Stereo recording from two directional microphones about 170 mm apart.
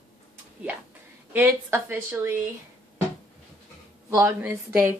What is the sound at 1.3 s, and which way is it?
A woman's voice, 10° right (ahead or behind).